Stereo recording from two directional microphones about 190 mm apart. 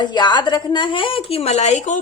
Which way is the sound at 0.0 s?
25° left (ahead or behind).